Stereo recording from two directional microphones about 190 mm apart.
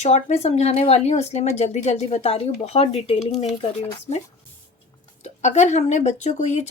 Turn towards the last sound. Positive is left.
turn(degrees=35)  # may be behind; listen again after turning